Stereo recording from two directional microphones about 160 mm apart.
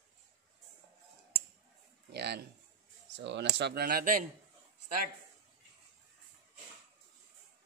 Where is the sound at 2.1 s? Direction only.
90° right; by 4.2 s 65° right (ahead or behind).